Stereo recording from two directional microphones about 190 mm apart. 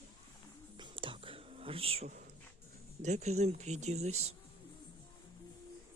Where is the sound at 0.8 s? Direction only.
25° right (ahead or behind).